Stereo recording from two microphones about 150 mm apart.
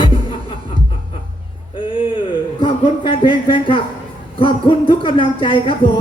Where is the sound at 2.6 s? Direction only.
35° left (ahead or behind).